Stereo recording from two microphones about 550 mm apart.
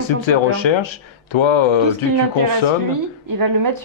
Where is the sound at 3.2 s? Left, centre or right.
Right.